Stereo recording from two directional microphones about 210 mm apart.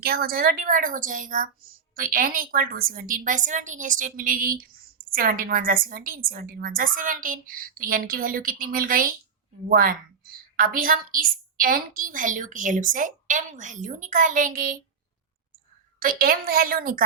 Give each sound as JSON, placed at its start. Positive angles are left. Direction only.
{"t": 0.0, "sound": "a woman's voice", "side_deg": -45}
{"t": 16.0, "sound": "a woman's voice", "side_deg": -45}